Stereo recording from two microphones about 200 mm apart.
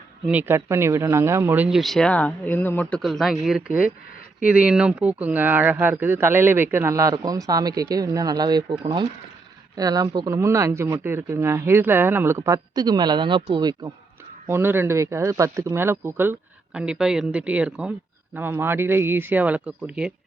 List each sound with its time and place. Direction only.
0.3 s speech: 10° right (ahead or behind)